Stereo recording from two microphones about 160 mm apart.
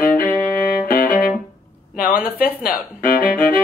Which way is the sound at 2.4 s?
65° left (ahead or behind).